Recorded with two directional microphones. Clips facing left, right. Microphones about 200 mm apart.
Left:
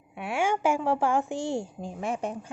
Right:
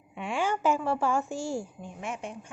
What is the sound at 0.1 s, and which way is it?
A woman's voice, 10° left (ahead or behind).